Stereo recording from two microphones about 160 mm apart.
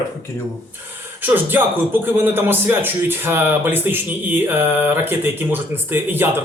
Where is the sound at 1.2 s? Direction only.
10° right (ahead or behind).